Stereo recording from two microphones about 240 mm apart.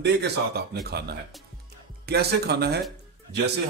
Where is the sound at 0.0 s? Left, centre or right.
Right.